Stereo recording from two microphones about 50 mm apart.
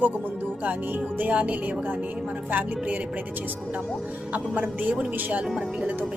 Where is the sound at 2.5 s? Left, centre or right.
Right.